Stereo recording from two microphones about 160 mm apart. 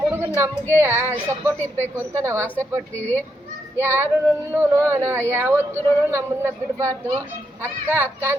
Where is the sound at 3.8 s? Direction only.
15° right (ahead or behind).